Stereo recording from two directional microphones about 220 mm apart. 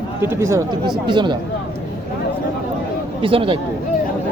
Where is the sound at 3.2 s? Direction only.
25° right (ahead or behind).